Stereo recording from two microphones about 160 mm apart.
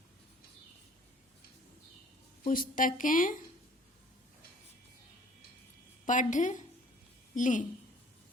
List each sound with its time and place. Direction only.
2.5 s speech: 60° left (ahead or behind)
6.1 s a woman's voice: 50° left (ahead or behind)